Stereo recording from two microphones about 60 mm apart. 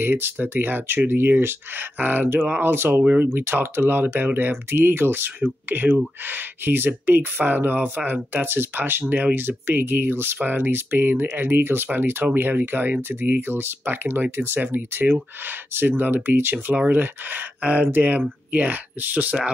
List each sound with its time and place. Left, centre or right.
0.0 s speech: right